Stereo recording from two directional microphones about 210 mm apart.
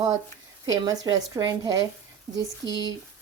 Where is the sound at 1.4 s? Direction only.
15° right (ahead or behind).